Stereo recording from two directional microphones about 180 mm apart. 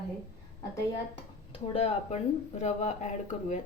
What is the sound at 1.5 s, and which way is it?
Speech, 35° left (ahead or behind).